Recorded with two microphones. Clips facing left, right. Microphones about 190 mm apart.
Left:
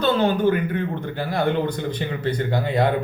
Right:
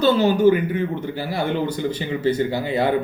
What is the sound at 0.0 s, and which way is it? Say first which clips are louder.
Speech: right 3 dB; 5° right (ahead or behind).